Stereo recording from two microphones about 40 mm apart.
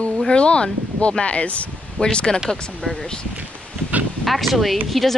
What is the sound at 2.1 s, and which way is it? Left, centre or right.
Speech, centre.